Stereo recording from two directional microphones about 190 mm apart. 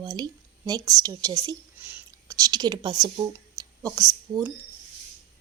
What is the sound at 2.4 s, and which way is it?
Speech, 20° right (ahead or behind).